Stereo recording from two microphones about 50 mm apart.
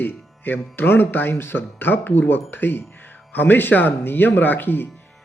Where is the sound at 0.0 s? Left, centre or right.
Left.